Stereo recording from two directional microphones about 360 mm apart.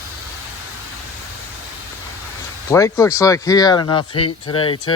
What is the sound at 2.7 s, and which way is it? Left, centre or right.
Speech, centre.